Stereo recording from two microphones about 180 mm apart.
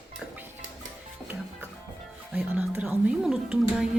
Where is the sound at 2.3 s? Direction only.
5° right (ahead or behind).